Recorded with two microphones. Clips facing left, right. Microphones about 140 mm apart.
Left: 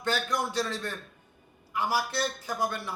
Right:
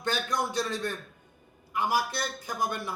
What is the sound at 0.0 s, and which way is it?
A man's voice, 15° right (ahead or behind).